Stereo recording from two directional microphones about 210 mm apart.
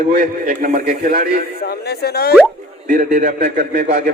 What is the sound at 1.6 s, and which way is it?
Speech, 50° left (ahead or behind).